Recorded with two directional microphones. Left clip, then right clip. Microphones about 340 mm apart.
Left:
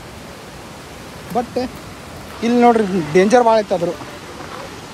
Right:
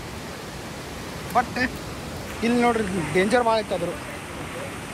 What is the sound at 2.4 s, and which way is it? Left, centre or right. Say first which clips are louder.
A man's voice: left 9 dB; centre.